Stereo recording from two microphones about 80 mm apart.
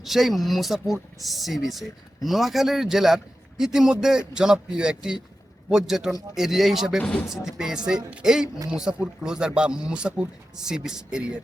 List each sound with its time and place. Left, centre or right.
0.0 s a man's voice: centre
7.0 s speech: centre
7.3 s a man's voice: centre